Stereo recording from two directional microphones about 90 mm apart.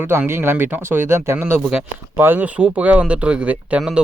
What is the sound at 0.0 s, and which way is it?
Speech, 25° right (ahead or behind).